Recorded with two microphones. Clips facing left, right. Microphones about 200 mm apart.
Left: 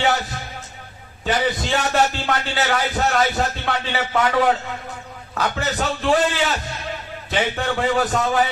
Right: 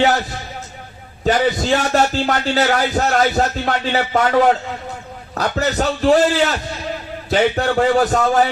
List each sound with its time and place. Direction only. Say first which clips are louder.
1.2 s a man's voice: right 5 dB; 40° right (ahead or behind)
5.3 s a man's voice: right 4 dB; 40° right (ahead or behind)